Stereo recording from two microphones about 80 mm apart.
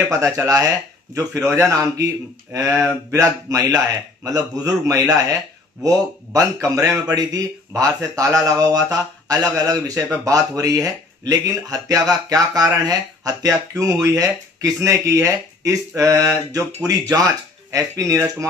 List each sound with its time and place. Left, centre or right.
0.1 s speech: right
17.6 s speech: right